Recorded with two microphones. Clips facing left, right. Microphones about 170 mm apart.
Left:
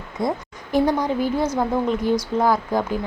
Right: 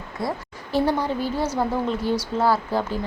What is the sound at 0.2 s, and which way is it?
A woman's voice, 20° left (ahead or behind).